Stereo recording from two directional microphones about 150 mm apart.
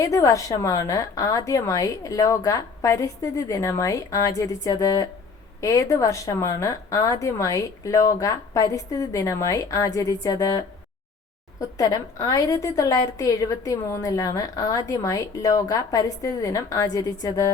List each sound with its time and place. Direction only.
0.0 s a woman's voice: 20° left (ahead or behind)
11.8 s a woman's voice: 25° left (ahead or behind)